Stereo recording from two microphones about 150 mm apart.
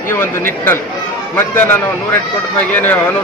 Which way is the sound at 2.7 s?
10° left (ahead or behind).